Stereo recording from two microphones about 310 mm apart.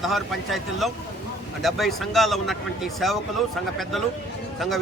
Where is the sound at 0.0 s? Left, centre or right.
Centre.